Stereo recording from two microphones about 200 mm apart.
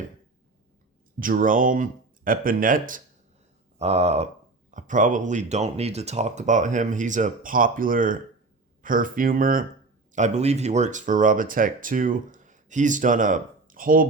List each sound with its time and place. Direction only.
1.2 s speech: 45° right (ahead or behind)
3.8 s speech: 30° right (ahead or behind)